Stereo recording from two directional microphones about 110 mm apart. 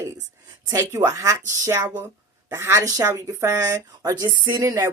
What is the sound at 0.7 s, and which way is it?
Speech, 30° right (ahead or behind).